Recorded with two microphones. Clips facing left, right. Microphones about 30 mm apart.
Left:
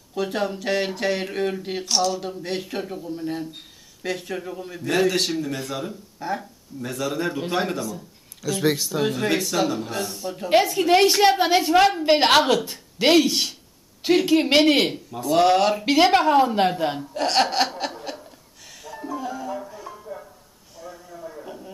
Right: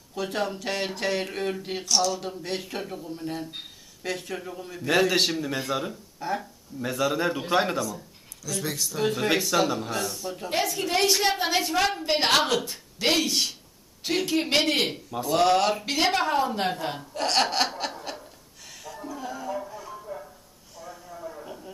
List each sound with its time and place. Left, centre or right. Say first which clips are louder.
0.1 s a woman's voice: left 4 dB; centre
4.8 s a man's voice: left 1 dB; centre
6.1 s a man's voice: left 2 dB; centre
8.4 s speech: left 8 dB; left
9.0 s speech: even; centre
10.6 s a woman's voice: left 5 dB; centre
11.4 s a woman's voice: left 6 dB; centre
12.0 s a woman's voice: left 6 dB; left
15.0 s speech: left 3 dB; centre
19.1 s music: left 3 dB; centre
20.8 s a sound: left 1 dB; centre